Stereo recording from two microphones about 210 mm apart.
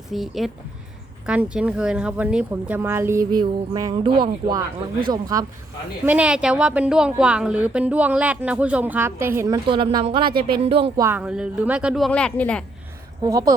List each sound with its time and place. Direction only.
0.1 s a woman's voice: centre (ahead or behind); by 5.5 s 20° right (ahead or behind)
6.1 s a woman's voice: 5° right (ahead or behind)
9.6 s speech: 25° right (ahead or behind)
11.0 s a woman's voice: 10° right (ahead or behind)
13.2 s speech: 15° right (ahead or behind)